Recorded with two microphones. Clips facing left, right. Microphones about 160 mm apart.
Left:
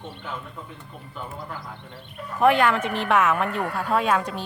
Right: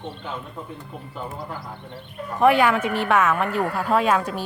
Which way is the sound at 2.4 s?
5° right (ahead or behind).